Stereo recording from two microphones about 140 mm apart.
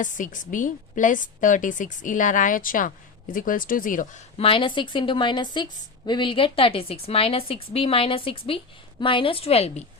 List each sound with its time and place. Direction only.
0.0 s a woman's voice: 70° left (ahead or behind)
4.4 s a woman's voice: 40° left (ahead or behind)